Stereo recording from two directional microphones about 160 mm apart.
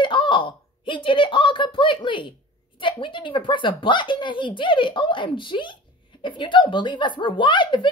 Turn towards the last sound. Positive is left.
turn(degrees=30)  # may be behind; listen again after turning